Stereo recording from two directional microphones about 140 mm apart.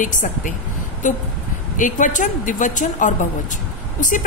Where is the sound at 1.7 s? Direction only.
65° left (ahead or behind).